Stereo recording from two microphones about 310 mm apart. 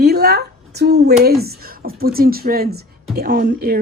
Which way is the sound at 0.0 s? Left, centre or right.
Right.